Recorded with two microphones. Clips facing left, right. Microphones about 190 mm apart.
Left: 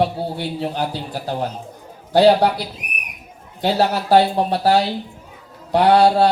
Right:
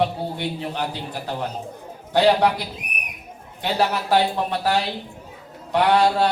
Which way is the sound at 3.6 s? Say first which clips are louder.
Left 4 dB; 35° left (ahead or behind).